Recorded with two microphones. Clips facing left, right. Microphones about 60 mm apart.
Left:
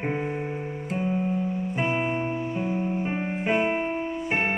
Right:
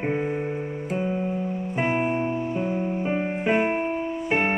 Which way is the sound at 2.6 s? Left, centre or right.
Centre.